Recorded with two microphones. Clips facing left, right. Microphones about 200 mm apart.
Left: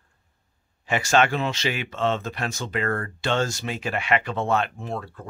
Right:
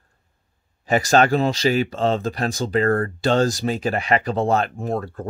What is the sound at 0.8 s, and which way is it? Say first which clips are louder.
Speech: right 4 dB; 40° right (ahead or behind).